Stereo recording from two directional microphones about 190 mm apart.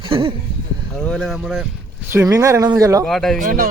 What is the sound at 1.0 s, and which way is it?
Speech, 5° left (ahead or behind).